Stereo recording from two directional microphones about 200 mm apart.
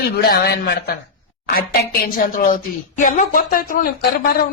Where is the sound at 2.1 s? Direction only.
45° left (ahead or behind).